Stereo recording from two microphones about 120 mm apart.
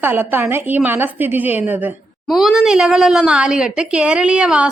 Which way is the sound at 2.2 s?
Centre (ahead or behind).